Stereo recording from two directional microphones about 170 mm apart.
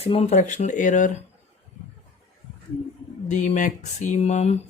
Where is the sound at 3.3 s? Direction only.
45° left (ahead or behind).